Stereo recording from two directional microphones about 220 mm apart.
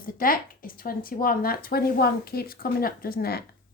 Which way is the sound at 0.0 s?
40° left (ahead or behind).